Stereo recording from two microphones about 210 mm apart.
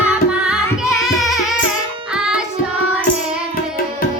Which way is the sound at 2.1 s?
5° right (ahead or behind).